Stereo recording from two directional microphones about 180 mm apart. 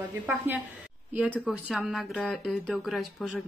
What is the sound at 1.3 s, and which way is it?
Speech, centre (ahead or behind).